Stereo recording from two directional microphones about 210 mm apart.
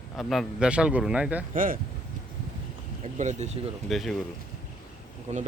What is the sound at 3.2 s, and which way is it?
Speech, 35° right (ahead or behind).